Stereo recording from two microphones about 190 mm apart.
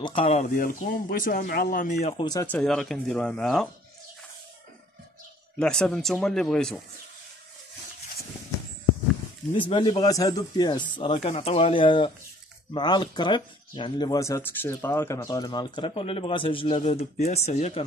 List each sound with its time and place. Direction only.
0.0 s speech: 30° left (ahead or behind)
0.6 s speech: 45° left (ahead or behind)
2.4 s speech: 5° left (ahead or behind)
5.6 s speech: 5° left (ahead or behind)
9.6 s speech: 25° left (ahead or behind)
11.2 s speech: 35° left (ahead or behind)